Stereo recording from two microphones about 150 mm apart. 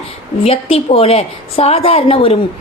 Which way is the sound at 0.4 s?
40° left (ahead or behind).